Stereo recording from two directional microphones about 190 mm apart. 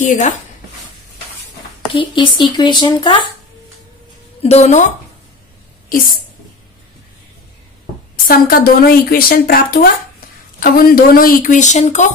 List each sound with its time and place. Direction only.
0.0 s a woman's voice: 40° left (ahead or behind)
1.9 s speech: 25° left (ahead or behind)
4.4 s a woman's voice: 35° left (ahead or behind)
8.3 s a woman's voice: 50° left (ahead or behind)